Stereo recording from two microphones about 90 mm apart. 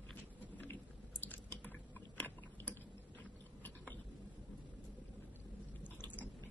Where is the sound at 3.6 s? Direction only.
20° left (ahead or behind).